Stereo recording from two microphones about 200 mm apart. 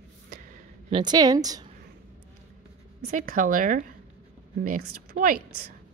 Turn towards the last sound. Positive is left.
turn(degrees=-45)  # may be behind; listen again after turning